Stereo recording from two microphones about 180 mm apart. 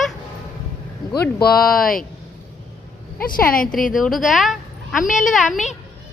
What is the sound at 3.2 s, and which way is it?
Speech, 50° left (ahead or behind).